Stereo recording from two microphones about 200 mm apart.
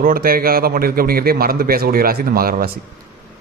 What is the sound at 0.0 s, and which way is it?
A man's voice, 45° right (ahead or behind).